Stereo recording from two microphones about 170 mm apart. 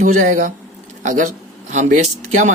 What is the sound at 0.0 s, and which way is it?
Speech, 45° right (ahead or behind).